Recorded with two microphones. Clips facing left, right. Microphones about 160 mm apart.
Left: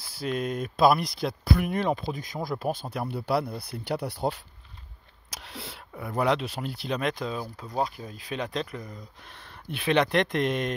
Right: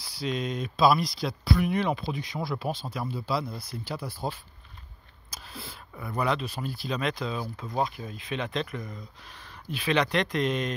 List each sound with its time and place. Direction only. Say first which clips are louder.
0.0 s speech: left 1 dB; 50° left (ahead or behind); by 4.4 s 65° left (ahead or behind)
5.3 s a sound: left 2 dB; 80° left
6.0 s speech: left 3 dB; 80° left; by 7.3 s 50° left (ahead or behind)
7.3 s speech: even; 10° left (ahead or behind)
7.8 s speech: left 1 dB; 35° left (ahead or behind)
9.3 s speech: right 1 dB; 60° left (ahead or behind)